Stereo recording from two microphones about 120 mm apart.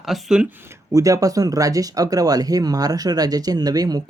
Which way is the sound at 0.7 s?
25° right (ahead or behind).